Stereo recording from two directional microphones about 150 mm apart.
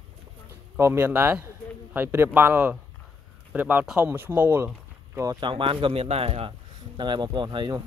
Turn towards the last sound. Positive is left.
turn(degrees=-30)  # may be behind; listen again after turning